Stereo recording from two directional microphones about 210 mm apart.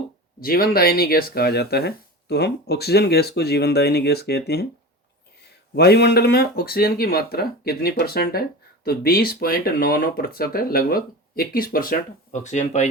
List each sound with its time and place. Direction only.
0.4 s speech: 45° left (ahead or behind)
5.7 s speech: 50° left (ahead or behind); by 12.9 s 35° left (ahead or behind)